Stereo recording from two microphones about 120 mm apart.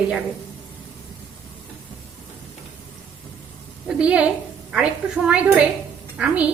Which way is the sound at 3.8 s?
10° right (ahead or behind).